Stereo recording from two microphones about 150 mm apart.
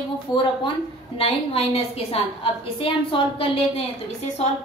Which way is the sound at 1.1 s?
40° left (ahead or behind).